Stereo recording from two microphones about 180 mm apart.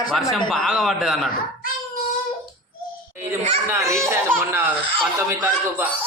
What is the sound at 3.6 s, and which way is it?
Speech, 15° right (ahead or behind).